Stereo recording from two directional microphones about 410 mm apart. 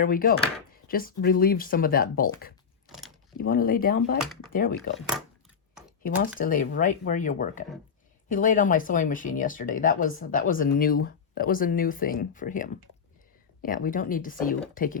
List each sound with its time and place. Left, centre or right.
0.0 s speech: left
2.8 s a sound: centre
3.3 s speech: left
4.9 s speech: centre
6.0 s speech: left